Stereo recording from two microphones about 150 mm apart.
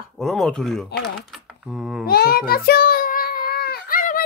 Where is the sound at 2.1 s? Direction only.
90° left.